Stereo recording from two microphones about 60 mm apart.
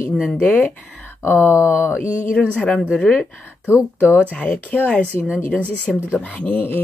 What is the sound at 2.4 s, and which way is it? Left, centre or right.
Speech, centre.